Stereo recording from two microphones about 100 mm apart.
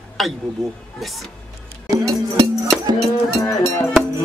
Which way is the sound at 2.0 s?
35° right (ahead or behind).